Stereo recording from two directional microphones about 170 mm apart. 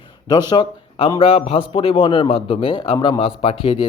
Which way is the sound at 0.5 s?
30° left (ahead or behind).